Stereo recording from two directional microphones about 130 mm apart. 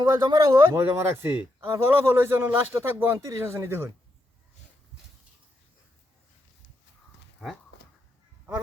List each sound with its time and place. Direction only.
0.0 s speech: 30° right (ahead or behind)